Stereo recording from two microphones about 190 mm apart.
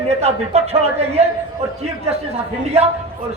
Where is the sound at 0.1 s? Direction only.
35° right (ahead or behind).